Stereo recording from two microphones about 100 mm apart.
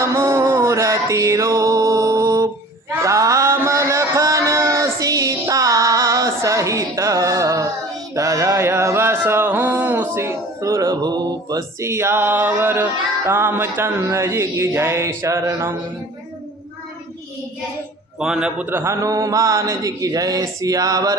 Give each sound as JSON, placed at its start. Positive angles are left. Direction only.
{"t": 0.0, "sound": "music", "side_deg": -30}
{"t": 3.0, "sound": "a sound", "side_deg": -30}
{"t": 8.1, "sound": "mantra", "side_deg": -35}
{"t": 18.2, "sound": "a man's voice", "side_deg": -5}
{"t": 18.7, "sound": "a man's voice", "side_deg": -25}
{"t": 19.0, "sound": "speech", "side_deg": -35}